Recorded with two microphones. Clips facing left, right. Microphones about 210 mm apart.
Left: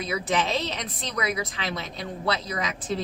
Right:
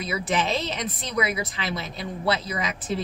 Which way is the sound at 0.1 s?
Centre (ahead or behind).